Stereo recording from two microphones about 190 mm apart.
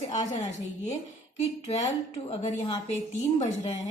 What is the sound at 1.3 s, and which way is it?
A woman's voice, 35° left (ahead or behind).